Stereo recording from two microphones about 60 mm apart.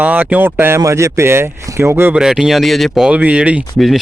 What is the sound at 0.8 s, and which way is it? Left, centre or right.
A man's voice, right.